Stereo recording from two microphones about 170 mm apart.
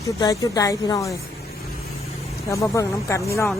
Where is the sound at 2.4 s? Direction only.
20° left (ahead or behind).